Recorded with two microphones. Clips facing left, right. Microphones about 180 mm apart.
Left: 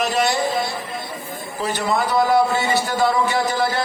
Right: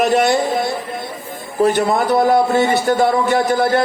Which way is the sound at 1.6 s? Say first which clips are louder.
Right 7 dB; 55° right (ahead or behind).